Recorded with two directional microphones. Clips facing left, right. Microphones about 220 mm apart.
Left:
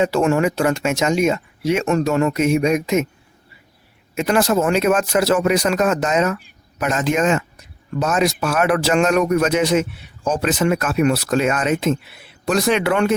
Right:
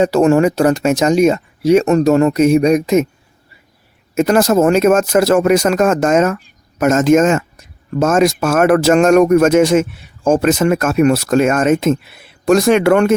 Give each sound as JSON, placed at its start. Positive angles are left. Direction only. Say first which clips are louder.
{"t": 0.0, "sound": "speech", "louder": "right 6 dB", "side_deg": -40}
{"t": 4.1, "sound": "speech", "louder": "right 5 dB", "side_deg": -45}